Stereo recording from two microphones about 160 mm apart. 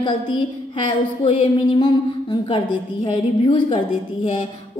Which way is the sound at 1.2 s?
30° left (ahead or behind).